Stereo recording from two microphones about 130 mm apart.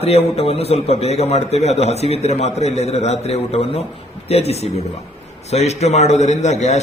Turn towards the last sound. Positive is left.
turn(degrees=60)  # may be behind; listen again after turning